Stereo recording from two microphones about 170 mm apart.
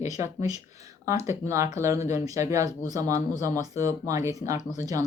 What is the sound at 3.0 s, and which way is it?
Speech, 50° left (ahead or behind).